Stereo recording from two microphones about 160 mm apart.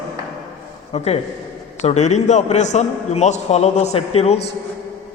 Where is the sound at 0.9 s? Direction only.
40° left (ahead or behind).